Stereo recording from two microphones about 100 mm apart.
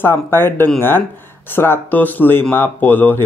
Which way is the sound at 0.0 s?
20° left (ahead or behind).